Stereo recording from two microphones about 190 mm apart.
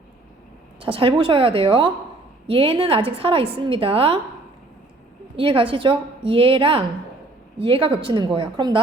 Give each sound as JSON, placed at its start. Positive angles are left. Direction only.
{"t": 0.8, "sound": "a woman's voice", "side_deg": -30}
{"t": 5.4, "sound": "a woman's voice", "side_deg": -30}